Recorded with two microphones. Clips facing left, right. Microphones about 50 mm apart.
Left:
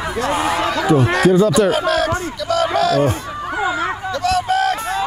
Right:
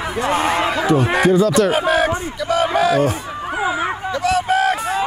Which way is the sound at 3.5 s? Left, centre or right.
Centre.